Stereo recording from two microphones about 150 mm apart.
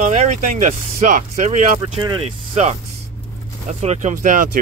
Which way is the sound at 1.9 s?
35° right (ahead or behind).